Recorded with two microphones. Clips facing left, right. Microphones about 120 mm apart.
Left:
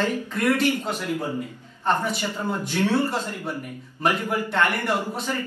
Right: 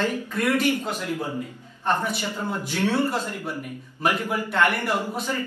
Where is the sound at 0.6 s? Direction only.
10° right (ahead or behind).